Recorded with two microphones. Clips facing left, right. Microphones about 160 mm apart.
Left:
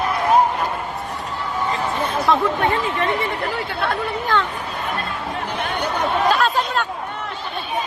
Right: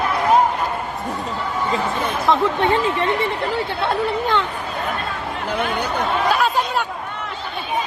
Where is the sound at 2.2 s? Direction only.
20° right (ahead or behind).